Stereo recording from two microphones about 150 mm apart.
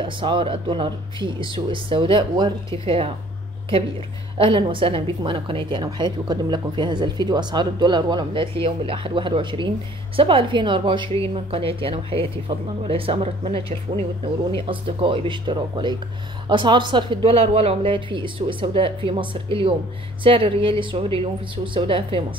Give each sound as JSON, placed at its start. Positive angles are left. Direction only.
{"t": 0.0, "sound": "a woman's voice", "side_deg": -35}
{"t": 4.4, "sound": "a woman's voice", "side_deg": -35}